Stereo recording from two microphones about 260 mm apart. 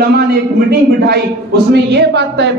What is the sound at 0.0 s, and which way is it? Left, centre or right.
A man's voice, right.